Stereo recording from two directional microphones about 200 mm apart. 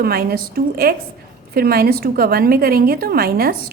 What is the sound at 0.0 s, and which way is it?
A woman's voice, 50° right (ahead or behind).